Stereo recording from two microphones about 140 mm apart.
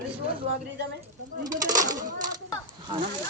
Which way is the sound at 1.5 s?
25° right (ahead or behind).